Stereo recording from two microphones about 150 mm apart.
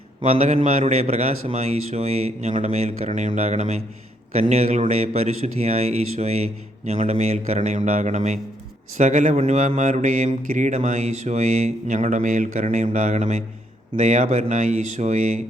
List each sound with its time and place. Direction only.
0.2 s a man's voice: 50° right (ahead or behind)